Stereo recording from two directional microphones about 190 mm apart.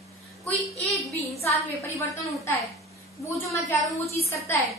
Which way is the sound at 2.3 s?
15° left (ahead or behind).